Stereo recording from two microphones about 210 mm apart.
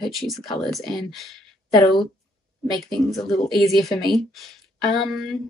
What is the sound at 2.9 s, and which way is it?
Speech, centre (ahead or behind).